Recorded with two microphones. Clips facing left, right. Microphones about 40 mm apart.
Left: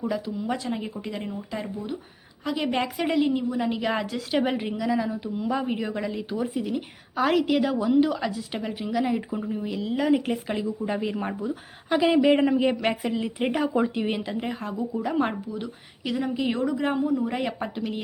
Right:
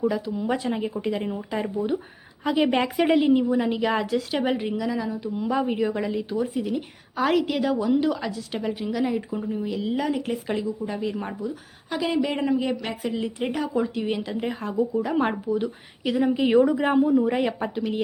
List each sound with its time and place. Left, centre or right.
0.0 s speech: centre; by 2.7 s right
2.7 s a woman's voice: centre
10.1 s a woman's voice: centre
10.7 s speech: centre
13.0 s a woman's voice: centre
13.4 s speech: centre
14.2 s a woman's voice: centre